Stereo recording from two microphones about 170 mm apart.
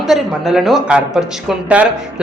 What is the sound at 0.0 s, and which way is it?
A woman's voice, centre (ahead or behind).